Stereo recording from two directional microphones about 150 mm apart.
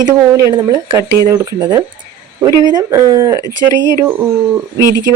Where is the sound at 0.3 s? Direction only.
20° right (ahead or behind).